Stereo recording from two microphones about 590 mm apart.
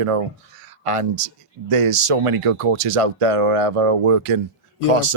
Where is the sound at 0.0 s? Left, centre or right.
Right.